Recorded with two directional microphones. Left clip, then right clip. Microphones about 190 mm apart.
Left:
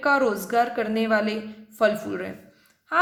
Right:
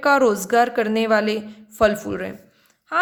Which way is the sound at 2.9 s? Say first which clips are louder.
Right 1 dB; 20° right (ahead or behind).